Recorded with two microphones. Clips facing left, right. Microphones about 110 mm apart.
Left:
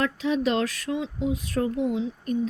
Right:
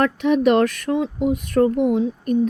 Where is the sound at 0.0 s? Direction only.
60° right (ahead or behind).